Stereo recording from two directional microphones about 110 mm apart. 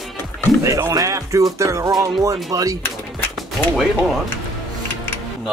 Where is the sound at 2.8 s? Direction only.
20° left (ahead or behind).